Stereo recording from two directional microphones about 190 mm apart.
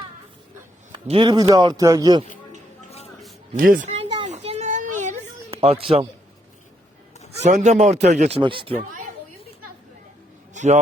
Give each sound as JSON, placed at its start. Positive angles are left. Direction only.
{"t": 0.9, "sound": "a man's voice", "side_deg": -25}
{"t": 3.6, "sound": "a woman's voice", "side_deg": -45}
{"t": 4.3, "sound": "a sound", "side_deg": -35}
{"t": 7.4, "sound": "speech", "side_deg": -40}
{"t": 8.4, "sound": "a man's voice", "side_deg": -25}
{"t": 10.5, "sound": "a sound", "side_deg": -40}